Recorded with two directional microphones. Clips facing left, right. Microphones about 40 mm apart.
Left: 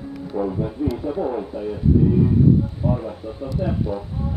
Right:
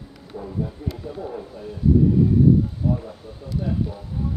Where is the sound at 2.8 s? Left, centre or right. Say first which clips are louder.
Left 2 dB; left.